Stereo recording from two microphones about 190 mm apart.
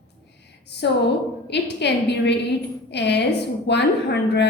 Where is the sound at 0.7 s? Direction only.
60° left (ahead or behind).